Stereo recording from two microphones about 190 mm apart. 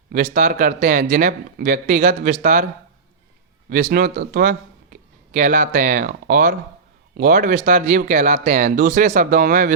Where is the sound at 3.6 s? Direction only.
50° right (ahead or behind).